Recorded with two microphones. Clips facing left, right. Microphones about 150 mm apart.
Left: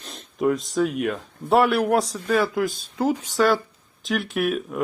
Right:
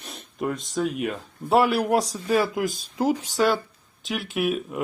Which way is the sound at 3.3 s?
Centre (ahead or behind).